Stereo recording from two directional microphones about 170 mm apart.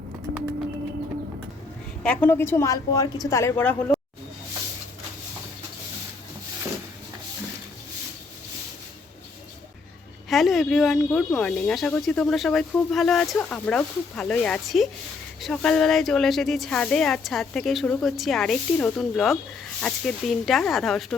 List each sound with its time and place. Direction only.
2.0 s a woman's voice: 10° left (ahead or behind)
10.2 s speech: centre (ahead or behind)